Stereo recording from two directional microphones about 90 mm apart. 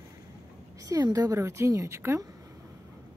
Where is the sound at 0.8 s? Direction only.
45° right (ahead or behind).